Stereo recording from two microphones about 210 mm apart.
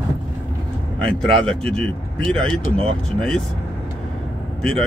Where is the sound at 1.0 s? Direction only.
5° left (ahead or behind).